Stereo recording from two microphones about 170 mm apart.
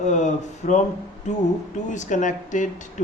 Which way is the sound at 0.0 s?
45° left (ahead or behind).